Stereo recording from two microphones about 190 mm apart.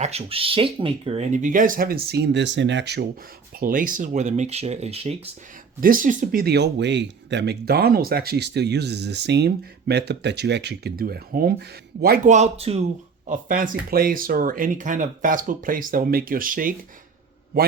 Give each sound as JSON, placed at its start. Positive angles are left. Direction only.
{"t": 0.0, "sound": "speech", "side_deg": -35}
{"t": 3.6, "sound": "speech", "side_deg": -45}
{"t": 5.8, "sound": "speech", "side_deg": -45}
{"t": 12.3, "sound": "speech", "side_deg": -35}
{"t": 13.2, "sound": "speech", "side_deg": -45}